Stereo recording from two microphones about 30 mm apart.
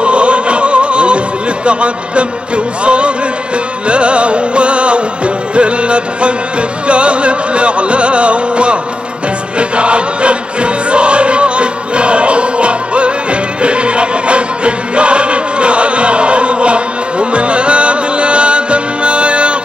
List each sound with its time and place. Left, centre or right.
0.0 s music: right